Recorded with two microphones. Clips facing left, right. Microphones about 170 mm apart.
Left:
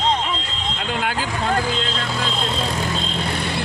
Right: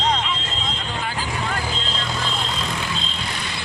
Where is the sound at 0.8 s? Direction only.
70° left (ahead or behind).